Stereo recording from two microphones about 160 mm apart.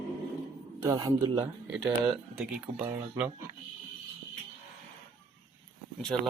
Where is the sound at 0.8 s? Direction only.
25° right (ahead or behind).